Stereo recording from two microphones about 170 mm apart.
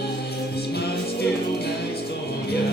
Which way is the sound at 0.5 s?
70° left (ahead or behind).